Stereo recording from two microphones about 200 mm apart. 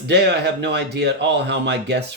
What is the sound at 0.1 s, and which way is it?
Speech, 60° right (ahead or behind).